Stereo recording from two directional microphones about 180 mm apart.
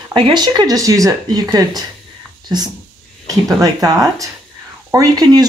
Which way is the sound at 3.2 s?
20° right (ahead or behind).